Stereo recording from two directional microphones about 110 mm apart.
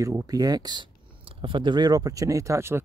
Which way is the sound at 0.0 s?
30° right (ahead or behind).